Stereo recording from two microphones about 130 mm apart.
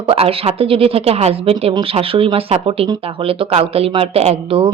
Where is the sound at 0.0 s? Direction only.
45° right (ahead or behind).